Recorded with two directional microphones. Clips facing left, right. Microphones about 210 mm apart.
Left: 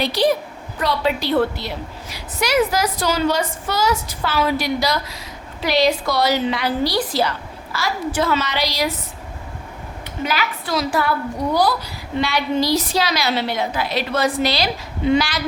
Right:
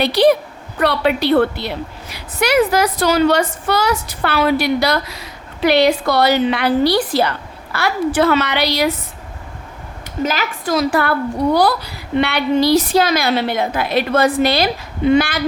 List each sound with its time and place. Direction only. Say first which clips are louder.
0.0 s a woman's voice: right 5 dB; 65° right (ahead or behind)
10.2 s a woman's voice: right 3 dB; 45° right (ahead or behind)